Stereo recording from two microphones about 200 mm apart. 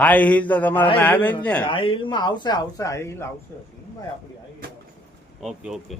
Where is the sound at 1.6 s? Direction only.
25° left (ahead or behind).